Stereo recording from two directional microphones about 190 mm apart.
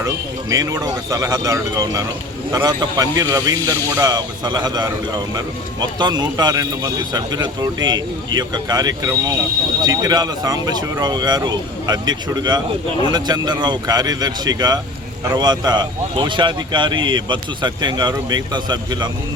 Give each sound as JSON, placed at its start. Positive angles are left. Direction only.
{"t": 0.5, "sound": "speech", "side_deg": -20}